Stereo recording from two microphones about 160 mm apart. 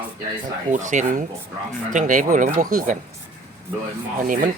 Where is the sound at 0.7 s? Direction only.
50° right (ahead or behind).